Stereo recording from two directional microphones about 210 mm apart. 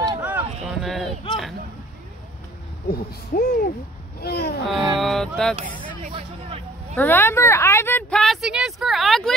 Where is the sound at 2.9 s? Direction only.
50° left (ahead or behind).